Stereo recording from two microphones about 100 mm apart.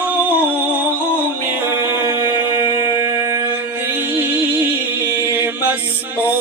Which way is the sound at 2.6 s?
45° left (ahead or behind).